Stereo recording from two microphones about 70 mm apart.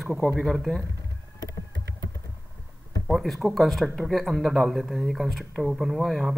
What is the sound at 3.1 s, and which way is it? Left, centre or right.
Speech, centre.